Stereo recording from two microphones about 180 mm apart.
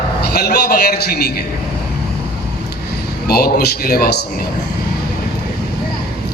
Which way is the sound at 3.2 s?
60° left (ahead or behind).